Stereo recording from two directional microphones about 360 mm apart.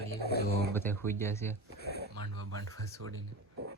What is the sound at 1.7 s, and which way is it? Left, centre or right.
Speech, left.